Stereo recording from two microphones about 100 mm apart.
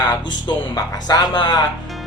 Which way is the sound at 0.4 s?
45° left (ahead or behind).